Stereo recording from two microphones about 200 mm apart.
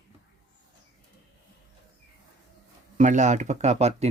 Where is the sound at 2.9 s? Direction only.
35° right (ahead or behind).